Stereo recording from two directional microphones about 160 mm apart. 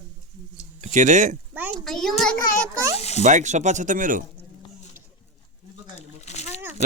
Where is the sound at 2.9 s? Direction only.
40° left (ahead or behind).